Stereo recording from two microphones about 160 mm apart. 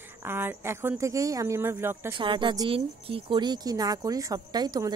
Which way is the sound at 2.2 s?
30° right (ahead or behind).